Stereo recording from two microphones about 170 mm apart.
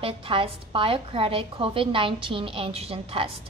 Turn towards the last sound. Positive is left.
turn(degrees=-35)  # may be behind; listen again after turning